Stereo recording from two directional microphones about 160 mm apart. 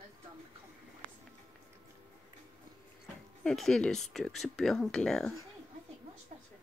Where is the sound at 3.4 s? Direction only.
Centre (ahead or behind).